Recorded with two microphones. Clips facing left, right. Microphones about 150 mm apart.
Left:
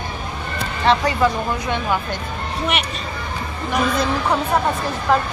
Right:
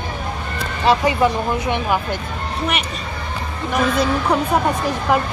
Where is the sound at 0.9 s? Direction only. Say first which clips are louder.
Right 1 dB; 15° right (ahead or behind).